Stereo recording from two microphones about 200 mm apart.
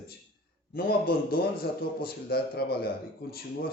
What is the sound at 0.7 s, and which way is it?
A man's voice, 50° left (ahead or behind).